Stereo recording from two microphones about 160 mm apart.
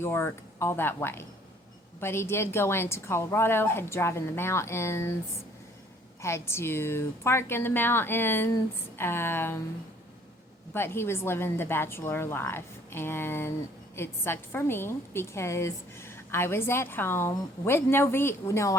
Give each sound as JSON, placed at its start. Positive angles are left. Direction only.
{"t": 0.0, "sound": "a woman's voice", "side_deg": 15}
{"t": 6.2, "sound": "a woman's voice", "side_deg": 15}
{"t": 10.8, "sound": "a woman's voice", "side_deg": 15}